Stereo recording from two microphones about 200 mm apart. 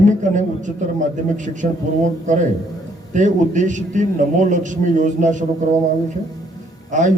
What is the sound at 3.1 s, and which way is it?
A man's voice, 40° right (ahead or behind).